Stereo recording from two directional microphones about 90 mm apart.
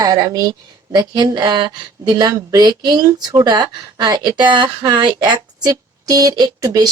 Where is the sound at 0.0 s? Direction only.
45° right (ahead or behind).